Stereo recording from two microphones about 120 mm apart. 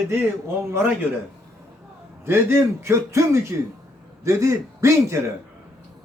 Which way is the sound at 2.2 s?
20° right (ahead or behind).